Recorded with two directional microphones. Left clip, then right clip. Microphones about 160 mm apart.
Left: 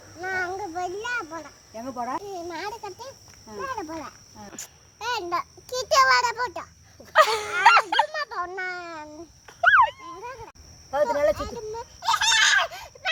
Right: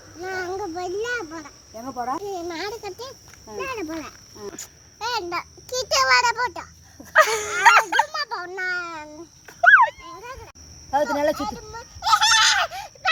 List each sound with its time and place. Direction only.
0.2 s a sound: 20° left (ahead or behind)
1.7 s speech: 20° right (ahead or behind)
2.3 s a child's voice: centre (ahead or behind)
4.6 s a child's voice: 20° left (ahead or behind)
7.0 s speech: centre (ahead or behind)
8.1 s a child's voice: 5° left (ahead or behind)
9.6 s dog: 5° right (ahead or behind)
10.0 s a sound: 15° left (ahead or behind)
11.2 s a child's voice: centre (ahead or behind)
11.9 s a sound: 15° left (ahead or behind)